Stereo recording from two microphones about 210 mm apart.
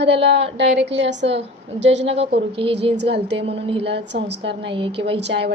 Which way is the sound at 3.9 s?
55° right (ahead or behind).